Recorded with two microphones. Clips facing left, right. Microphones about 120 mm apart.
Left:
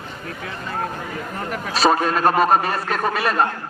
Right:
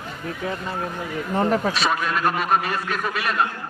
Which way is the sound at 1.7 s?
35° left (ahead or behind).